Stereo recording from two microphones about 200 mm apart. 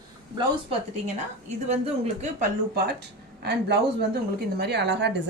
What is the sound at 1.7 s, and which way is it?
Speech, 30° right (ahead or behind).